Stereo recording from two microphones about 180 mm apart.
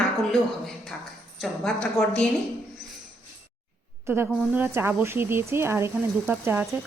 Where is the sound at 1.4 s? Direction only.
5° left (ahead or behind).